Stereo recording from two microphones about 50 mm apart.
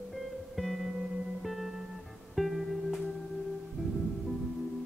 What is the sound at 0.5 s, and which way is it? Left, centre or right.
Music, centre.